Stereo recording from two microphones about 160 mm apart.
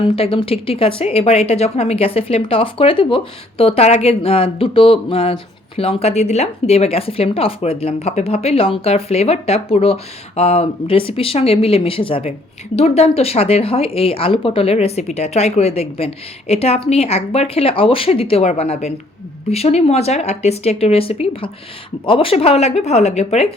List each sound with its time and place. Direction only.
0.0 s speech: 35° left (ahead or behind)